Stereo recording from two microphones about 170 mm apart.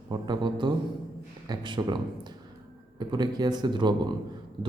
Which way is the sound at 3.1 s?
25° right (ahead or behind).